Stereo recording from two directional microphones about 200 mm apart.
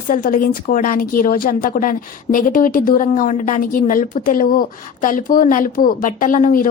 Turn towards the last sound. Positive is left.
turn(degrees=40)  # may be behind; listen again after turning